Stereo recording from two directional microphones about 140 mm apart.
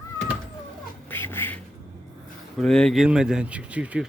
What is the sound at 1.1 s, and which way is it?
Duck, 15° left (ahead or behind).